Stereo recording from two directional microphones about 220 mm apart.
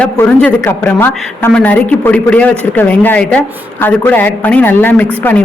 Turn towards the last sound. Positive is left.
turn(degrees=10)  # may be behind; listen again after turning